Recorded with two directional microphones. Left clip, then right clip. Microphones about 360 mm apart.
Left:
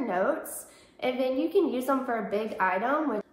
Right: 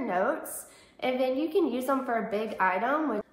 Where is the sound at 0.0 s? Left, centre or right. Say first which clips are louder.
Left 1 dB; centre.